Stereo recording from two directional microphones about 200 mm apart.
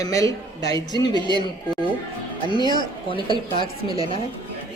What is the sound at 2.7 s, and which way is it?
A woman's voice, 25° left (ahead or behind).